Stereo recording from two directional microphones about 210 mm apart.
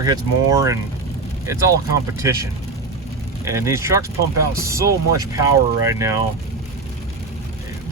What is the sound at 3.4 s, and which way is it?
Speech, 15° right (ahead or behind).